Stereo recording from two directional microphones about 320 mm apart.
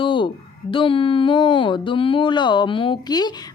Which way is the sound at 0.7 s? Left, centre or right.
Centre.